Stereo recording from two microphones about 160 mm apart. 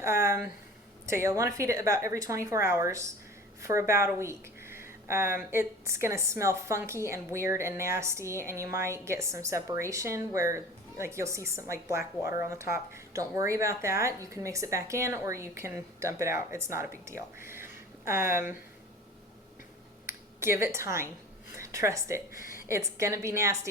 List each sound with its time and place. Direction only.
0.0 s a sound: 15° right (ahead or behind)
1.0 s a woman's voice: 15° right (ahead or behind)
20.1 s a woman's voice: 15° right (ahead or behind)